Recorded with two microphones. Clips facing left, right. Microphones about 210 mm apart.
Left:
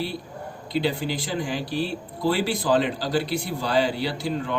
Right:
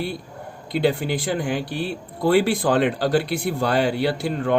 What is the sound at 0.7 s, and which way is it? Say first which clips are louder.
A man's voice: right 4 dB; 55° right (ahead or behind).